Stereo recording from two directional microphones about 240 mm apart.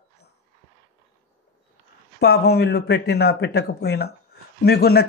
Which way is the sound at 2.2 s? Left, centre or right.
Left.